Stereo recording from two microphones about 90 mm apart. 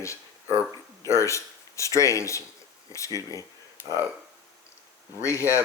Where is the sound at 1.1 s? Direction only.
35° left (ahead or behind).